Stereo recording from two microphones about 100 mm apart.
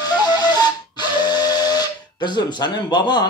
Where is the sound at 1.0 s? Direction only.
45° left (ahead or behind).